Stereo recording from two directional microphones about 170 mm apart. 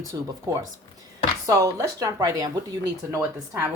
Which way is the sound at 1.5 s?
20° right (ahead or behind).